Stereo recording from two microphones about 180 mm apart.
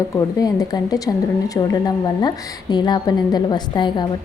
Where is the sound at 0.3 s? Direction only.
20° left (ahead or behind).